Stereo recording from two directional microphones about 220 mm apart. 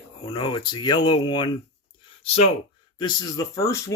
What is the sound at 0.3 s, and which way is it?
Speech, 20° left (ahead or behind).